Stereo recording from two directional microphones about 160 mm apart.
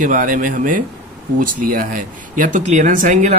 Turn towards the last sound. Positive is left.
turn(degrees=-55)  # may be behind; listen again after turning